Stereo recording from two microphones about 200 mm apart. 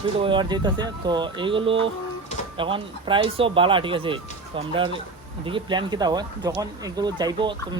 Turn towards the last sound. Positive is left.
turn(degrees=-20)  # may be behind; listen again after turning